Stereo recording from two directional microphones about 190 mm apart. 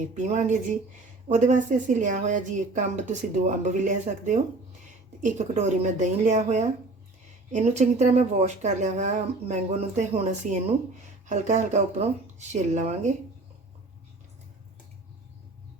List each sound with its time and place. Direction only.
0.1 s speech: 40° right (ahead or behind)